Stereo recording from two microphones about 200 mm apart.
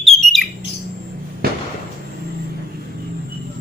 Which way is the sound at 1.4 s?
50° right (ahead or behind).